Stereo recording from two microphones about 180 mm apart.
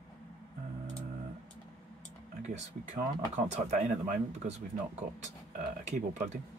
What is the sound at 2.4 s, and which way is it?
Speech, 45° right (ahead or behind).